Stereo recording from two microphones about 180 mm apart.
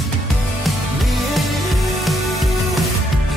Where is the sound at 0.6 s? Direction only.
Centre (ahead or behind).